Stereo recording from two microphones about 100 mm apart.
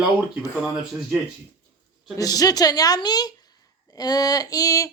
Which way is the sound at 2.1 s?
40° left (ahead or behind).